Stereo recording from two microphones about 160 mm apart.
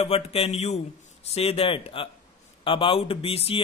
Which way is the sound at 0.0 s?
40° left (ahead or behind).